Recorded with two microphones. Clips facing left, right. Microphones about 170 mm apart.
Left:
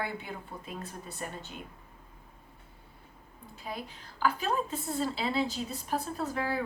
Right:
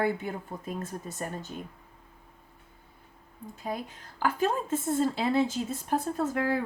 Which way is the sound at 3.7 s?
45° right (ahead or behind).